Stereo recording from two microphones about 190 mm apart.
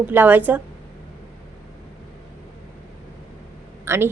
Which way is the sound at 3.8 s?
15° right (ahead or behind).